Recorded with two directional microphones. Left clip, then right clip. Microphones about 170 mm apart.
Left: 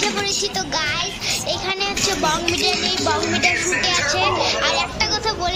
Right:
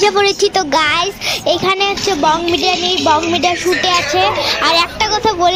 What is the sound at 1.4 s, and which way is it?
Speech, 45° right (ahead or behind).